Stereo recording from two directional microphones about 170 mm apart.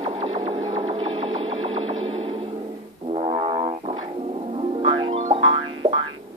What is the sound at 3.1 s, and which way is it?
Music, 30° right (ahead or behind).